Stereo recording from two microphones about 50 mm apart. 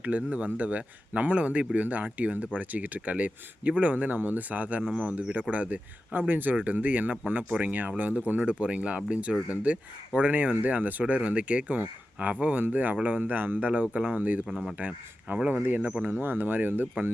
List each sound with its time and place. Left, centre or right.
0.0 s speech: right
13.9 s speech: right
15.4 s speech: right